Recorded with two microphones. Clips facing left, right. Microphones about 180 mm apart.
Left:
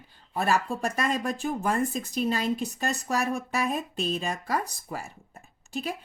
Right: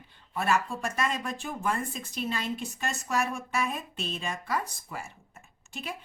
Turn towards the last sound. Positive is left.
turn(degrees=35)  # may be behind; listen again after turning